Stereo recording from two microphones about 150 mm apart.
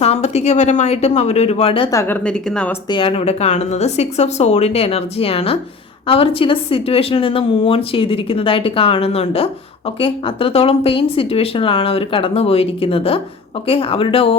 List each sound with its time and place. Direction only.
0.0 s speech: 45° left (ahead or behind)
1.9 s speech: 15° left (ahead or behind)
2.9 s speech: 35° left (ahead or behind)